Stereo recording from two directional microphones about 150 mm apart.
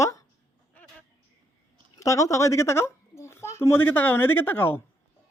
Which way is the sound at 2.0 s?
20° left (ahead or behind).